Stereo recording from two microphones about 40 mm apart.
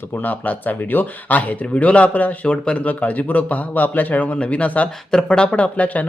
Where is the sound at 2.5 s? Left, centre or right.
Left.